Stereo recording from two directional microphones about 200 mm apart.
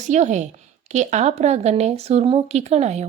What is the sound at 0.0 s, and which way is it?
Speech, 35° right (ahead or behind).